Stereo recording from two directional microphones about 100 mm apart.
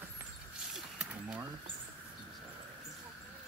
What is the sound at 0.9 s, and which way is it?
Speech, 15° right (ahead or behind).